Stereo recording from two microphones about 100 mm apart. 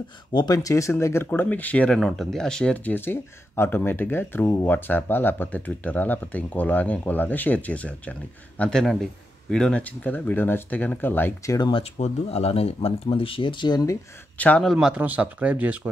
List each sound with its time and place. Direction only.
0.3 s speech: 40° left (ahead or behind); by 2.0 s 15° left (ahead or behind)
2.0 s speech: centre (ahead or behind); by 11.3 s 20° left (ahead or behind)
11.4 s speech: 40° left (ahead or behind)
11.7 s speech: 90° left; by 13.9 s 40° left (ahead or behind)
14.6 s speech: 5° right (ahead or behind)
15.0 s speech: 15° right (ahead or behind)